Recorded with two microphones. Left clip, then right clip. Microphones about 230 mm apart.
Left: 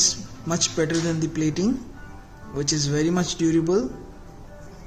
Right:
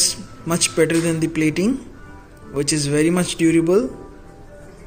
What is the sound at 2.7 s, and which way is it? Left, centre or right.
Speech, centre.